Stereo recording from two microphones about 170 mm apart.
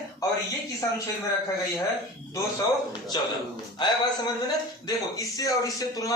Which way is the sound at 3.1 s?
25° left (ahead or behind).